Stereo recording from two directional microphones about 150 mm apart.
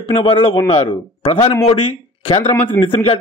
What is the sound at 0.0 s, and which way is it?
Speech, 35° left (ahead or behind).